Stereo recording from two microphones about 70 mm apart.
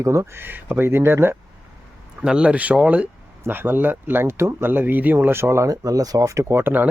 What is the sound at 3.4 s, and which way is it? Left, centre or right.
Speech, right.